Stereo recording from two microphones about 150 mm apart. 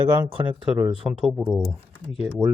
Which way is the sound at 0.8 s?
35° right (ahead or behind).